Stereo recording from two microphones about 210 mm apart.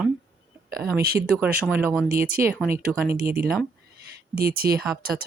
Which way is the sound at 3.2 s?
45° right (ahead or behind).